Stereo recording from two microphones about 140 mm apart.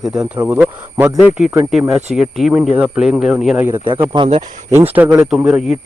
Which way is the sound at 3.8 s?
35° right (ahead or behind).